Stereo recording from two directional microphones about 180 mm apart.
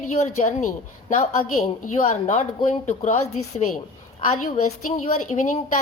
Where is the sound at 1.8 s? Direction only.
40° left (ahead or behind).